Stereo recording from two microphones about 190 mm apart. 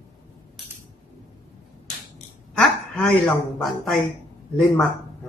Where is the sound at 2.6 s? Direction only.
Centre (ahead or behind).